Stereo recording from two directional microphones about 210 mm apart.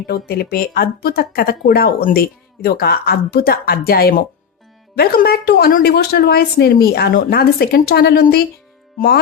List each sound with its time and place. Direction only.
0.1 s speech: 45° left (ahead or behind)